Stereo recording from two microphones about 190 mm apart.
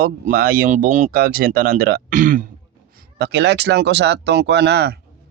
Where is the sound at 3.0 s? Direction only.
60° right (ahead or behind).